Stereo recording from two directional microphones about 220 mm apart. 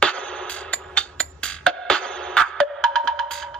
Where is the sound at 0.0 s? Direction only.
5° left (ahead or behind).